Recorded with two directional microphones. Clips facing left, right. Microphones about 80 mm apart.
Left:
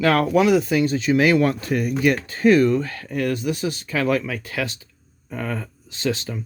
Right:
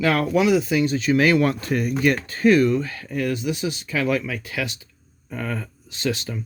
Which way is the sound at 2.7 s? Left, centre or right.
Left.